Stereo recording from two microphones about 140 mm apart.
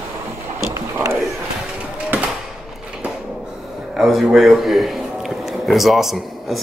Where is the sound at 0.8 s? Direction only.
20° right (ahead or behind).